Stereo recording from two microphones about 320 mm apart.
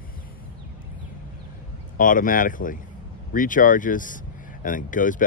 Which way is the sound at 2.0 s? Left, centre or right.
Left.